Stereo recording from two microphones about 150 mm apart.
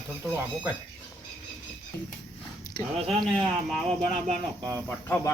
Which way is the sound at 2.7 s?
30° left (ahead or behind).